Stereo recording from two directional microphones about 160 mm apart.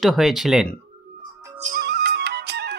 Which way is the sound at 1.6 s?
65° right (ahead or behind).